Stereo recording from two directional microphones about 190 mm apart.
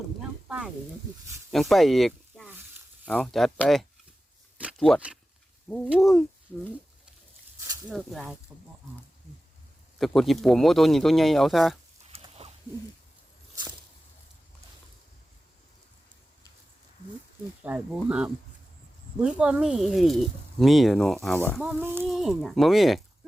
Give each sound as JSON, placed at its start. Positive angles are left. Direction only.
{"t": 0.2, "sound": "a sound", "side_deg": -5}
{"t": 1.5, "sound": "speech", "side_deg": 0}
{"t": 7.9, "sound": "speech", "side_deg": 0}
{"t": 10.0, "sound": "speech", "side_deg": 0}
{"t": 12.0, "sound": "a sound", "side_deg": -30}
{"t": 17.6, "sound": "speech", "side_deg": -5}
{"t": 21.6, "sound": "speech", "side_deg": -10}